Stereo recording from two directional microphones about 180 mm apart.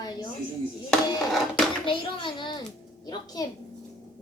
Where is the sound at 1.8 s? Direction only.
25° left (ahead or behind).